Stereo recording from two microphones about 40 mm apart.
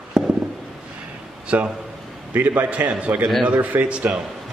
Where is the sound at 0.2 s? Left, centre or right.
Centre.